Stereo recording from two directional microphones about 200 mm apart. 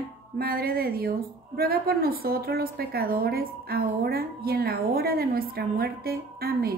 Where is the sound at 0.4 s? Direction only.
50° right (ahead or behind).